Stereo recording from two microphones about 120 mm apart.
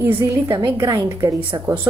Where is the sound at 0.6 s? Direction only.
30° right (ahead or behind).